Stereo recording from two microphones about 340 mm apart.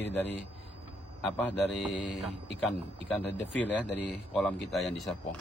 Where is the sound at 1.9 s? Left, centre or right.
Left.